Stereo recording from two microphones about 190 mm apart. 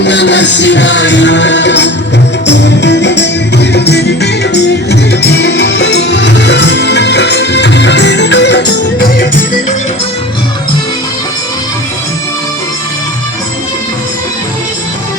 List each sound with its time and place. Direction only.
0.0 s music: 70° left (ahead or behind)